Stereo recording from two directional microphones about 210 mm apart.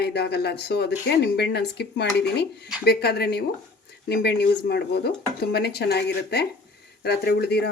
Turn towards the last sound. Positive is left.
turn(degrees=50)  # may be behind; listen again after turning